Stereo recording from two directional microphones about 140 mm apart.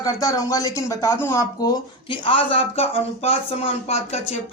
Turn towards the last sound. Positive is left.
turn(degrees=50)  # may be behind; listen again after turning